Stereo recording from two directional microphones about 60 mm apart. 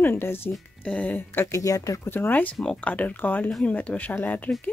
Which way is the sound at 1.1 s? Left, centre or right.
Left.